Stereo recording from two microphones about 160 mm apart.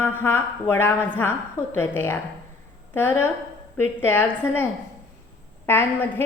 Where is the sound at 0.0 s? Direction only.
15° left (ahead or behind).